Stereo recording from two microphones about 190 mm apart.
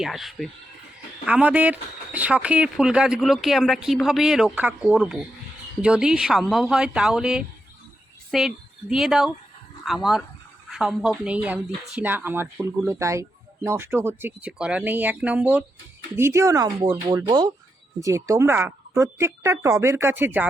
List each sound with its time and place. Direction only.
0.0 s speech: centre (ahead or behind)